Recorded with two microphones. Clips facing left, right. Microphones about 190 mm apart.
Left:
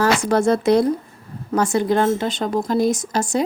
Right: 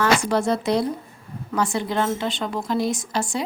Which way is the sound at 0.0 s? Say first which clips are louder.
Left 3 dB; 45° left (ahead or behind).